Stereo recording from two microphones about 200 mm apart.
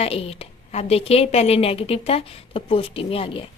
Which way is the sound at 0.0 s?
30° left (ahead or behind).